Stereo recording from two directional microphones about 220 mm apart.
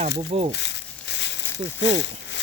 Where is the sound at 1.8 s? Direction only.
55° left (ahead or behind).